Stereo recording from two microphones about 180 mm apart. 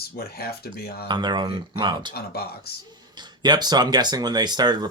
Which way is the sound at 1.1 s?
25° right (ahead or behind).